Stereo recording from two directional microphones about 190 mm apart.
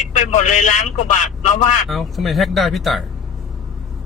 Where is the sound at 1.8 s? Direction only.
Centre (ahead or behind).